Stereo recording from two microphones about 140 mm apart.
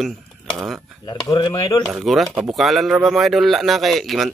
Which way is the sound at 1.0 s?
30° left (ahead or behind).